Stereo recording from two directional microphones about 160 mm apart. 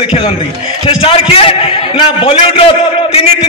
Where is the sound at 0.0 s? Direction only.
35° left (ahead or behind).